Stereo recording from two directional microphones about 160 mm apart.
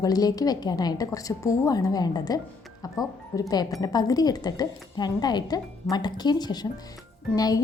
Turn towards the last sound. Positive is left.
turn(degrees=25)  # may be behind; listen again after turning